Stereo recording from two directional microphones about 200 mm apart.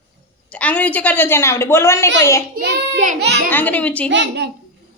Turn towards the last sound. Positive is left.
turn(degrees=-60)  # may be behind; listen again after turning